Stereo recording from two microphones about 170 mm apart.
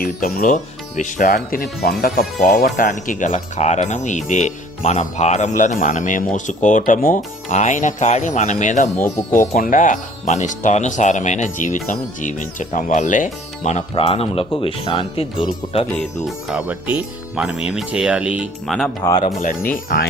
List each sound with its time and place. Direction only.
0.0 s speech: 60° left (ahead or behind)
1.5 s speech: 65° left (ahead or behind); by 8.9 s 45° left (ahead or behind)
9.0 s speech: 15° left (ahead or behind)
9.5 s speech: 50° left (ahead or behind); by 15.8 s 30° left (ahead or behind)
16.2 s speech: 5° right (ahead or behind)
19.4 s speech: 55° left (ahead or behind)